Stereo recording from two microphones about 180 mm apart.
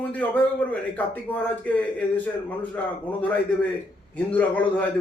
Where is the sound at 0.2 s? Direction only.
10° left (ahead or behind).